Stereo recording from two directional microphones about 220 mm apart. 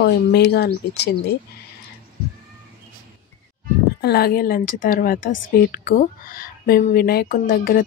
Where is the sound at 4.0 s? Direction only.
45° left (ahead or behind).